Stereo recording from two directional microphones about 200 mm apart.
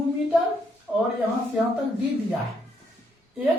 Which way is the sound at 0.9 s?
Centre (ahead or behind).